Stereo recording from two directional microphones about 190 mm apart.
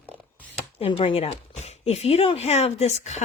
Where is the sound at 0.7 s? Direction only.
30° left (ahead or behind).